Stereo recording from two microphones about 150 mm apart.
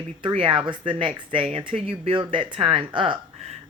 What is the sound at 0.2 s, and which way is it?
Speech, 35° right (ahead or behind).